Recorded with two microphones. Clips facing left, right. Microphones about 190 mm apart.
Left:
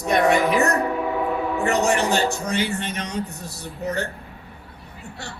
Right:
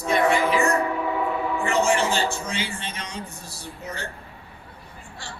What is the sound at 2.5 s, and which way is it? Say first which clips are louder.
Speech: left 6 dB; 65° left (ahead or behind).